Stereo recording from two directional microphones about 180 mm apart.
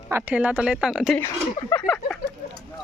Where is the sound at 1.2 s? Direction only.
15° left (ahead or behind).